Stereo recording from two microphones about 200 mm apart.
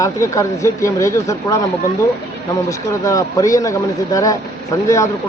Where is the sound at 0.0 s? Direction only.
15° left (ahead or behind).